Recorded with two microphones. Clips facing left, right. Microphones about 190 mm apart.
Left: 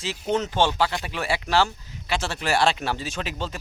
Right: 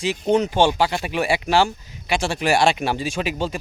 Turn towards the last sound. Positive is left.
turn(degrees=-10)  # may be behind; listen again after turning